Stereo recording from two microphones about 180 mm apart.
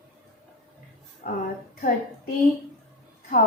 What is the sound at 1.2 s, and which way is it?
Speech, 55° left (ahead or behind).